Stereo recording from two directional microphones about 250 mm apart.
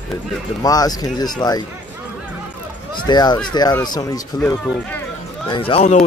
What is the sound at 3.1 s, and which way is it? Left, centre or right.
Speech, centre.